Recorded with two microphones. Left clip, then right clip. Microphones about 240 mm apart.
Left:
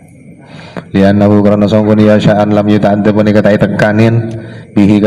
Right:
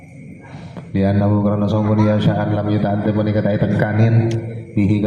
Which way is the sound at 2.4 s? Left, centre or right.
Left.